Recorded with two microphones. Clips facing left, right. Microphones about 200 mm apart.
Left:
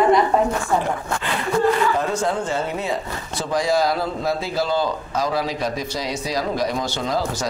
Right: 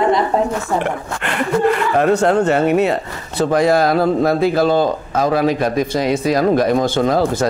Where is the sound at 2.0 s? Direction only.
65° right (ahead or behind).